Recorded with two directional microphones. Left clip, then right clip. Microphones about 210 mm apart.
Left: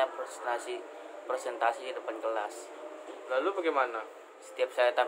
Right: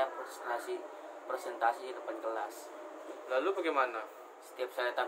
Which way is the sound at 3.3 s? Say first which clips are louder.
Left 3 dB; 15° right (ahead or behind).